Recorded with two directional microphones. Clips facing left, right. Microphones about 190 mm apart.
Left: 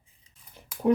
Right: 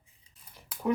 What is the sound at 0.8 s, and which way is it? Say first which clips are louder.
Speech: left 6 dB; 30° left (ahead or behind).